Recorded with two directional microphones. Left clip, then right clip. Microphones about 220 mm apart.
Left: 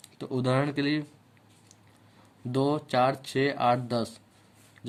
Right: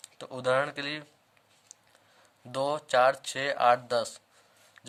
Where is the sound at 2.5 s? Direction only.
20° right (ahead or behind).